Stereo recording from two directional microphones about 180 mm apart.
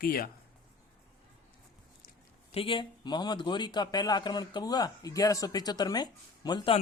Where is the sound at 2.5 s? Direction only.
30° left (ahead or behind).